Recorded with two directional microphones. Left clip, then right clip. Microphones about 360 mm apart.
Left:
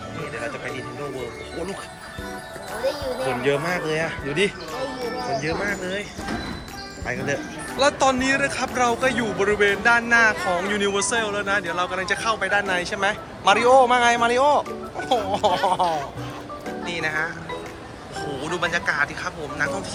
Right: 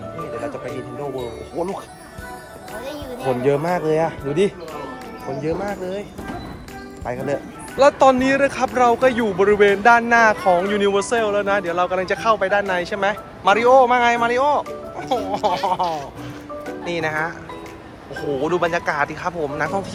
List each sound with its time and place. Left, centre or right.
3.4 s speech: centre
18.4 s speech: centre